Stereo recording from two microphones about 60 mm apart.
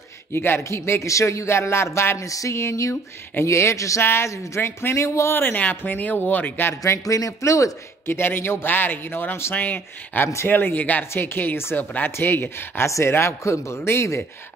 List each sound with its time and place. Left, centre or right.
0.3 s a man's voice: left
0.7 s a man's voice: left
2.2 s a sound: left
2.5 s a man's voice: left
4.0 s a man's voice: left
4.9 s a man's voice: left
5.3 s a man's voice: left
6.7 s speech: left
8.1 s a man's voice: left
10.2 s a man's voice: left
10.6 s a man's voice: left